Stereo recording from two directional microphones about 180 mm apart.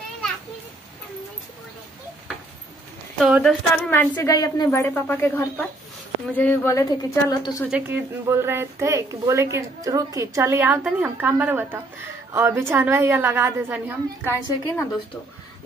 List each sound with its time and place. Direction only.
3.2 s a sound: centre (ahead or behind)
4.0 s a woman's voice: 15° left (ahead or behind)
7.7 s speech: 10° right (ahead or behind)
14.2 s a woman's voice: 15° left (ahead or behind)